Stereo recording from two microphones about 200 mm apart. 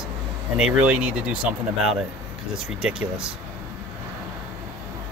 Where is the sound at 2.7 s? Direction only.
5° right (ahead or behind).